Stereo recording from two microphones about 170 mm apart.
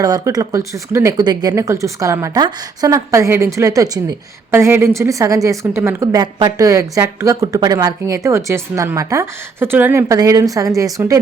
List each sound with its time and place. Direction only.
0.0 s a woman's voice: 20° right (ahead or behind)